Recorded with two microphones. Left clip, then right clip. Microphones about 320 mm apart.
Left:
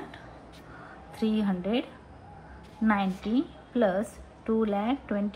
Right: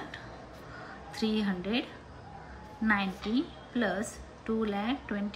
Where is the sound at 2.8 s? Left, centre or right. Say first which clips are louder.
Left 2 dB; centre.